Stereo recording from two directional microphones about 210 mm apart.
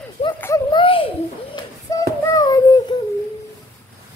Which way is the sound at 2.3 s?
20° left (ahead or behind).